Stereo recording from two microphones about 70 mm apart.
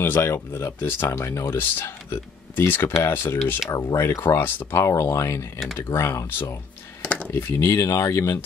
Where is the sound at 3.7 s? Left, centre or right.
Left.